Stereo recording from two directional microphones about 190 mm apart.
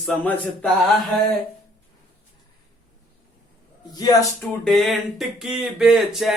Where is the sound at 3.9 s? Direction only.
20° left (ahead or behind).